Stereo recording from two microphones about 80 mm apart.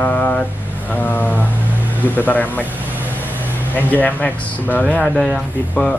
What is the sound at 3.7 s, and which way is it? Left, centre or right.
Speech, left.